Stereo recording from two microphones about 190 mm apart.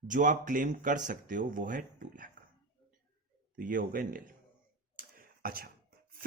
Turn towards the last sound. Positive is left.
turn(degrees=-50)  # may be behind; listen again after turning